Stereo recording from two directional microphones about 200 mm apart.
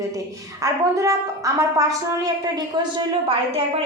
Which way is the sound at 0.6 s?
15° right (ahead or behind).